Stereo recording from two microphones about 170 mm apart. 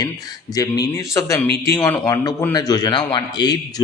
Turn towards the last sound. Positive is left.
turn(degrees=25)  # may be behind; listen again after turning